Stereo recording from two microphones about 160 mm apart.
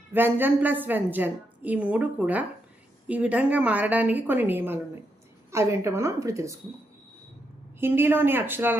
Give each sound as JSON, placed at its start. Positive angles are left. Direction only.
{"t": 0.1, "sound": "a woman's voice", "side_deg": -15}
{"t": 7.8, "sound": "a woman's voice", "side_deg": -15}